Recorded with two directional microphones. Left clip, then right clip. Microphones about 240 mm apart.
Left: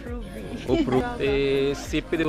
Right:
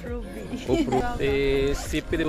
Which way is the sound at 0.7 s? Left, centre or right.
Centre.